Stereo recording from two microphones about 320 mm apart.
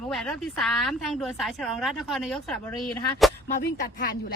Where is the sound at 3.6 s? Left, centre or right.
Left.